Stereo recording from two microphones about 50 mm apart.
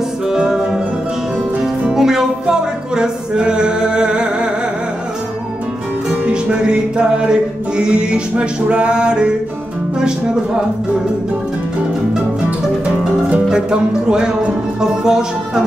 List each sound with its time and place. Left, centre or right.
0.3 s music: centre
1.9 s music: centre
6.0 s music: right
9.9 s speech: centre
13.5 s speech: centre